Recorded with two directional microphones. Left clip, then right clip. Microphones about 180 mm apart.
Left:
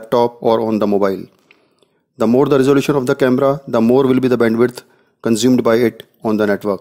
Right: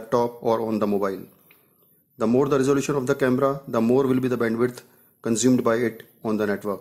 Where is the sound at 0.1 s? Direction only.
40° left (ahead or behind).